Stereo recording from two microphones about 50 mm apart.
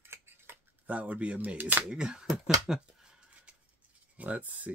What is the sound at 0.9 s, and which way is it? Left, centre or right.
Speech, right.